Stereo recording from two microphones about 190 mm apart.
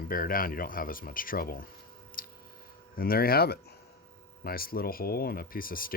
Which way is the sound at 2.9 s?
50° left (ahead or behind).